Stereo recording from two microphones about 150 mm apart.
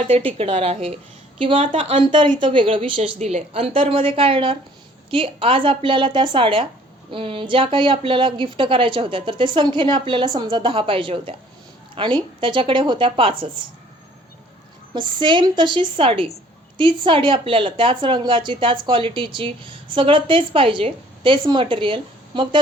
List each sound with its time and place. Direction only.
0.1 s a woman's voice: 35° right (ahead or behind)
14.9 s a woman's voice: 30° right (ahead or behind)